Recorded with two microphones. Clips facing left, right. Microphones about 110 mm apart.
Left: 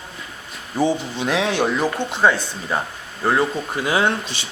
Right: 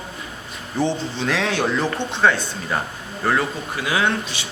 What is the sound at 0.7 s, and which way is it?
Speech, 10° left (ahead or behind).